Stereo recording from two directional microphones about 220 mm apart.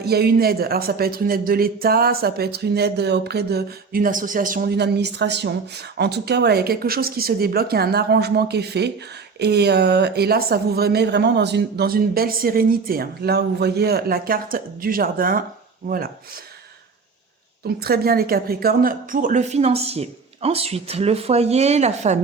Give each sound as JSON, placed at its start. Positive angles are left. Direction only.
{"t": 0.0, "sound": "a man's voice", "side_deg": -45}
{"t": 17.7, "sound": "a woman's voice", "side_deg": -45}